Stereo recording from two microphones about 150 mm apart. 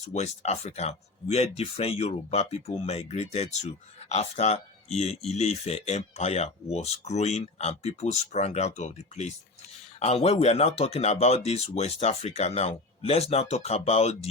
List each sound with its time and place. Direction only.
0.1 s speech: 45° left (ahead or behind)